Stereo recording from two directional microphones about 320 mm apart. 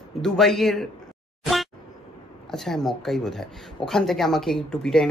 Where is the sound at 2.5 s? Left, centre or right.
Centre.